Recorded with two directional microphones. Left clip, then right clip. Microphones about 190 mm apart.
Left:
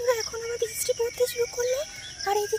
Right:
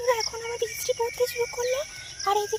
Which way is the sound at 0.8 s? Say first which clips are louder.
Even; 10° left (ahead or behind).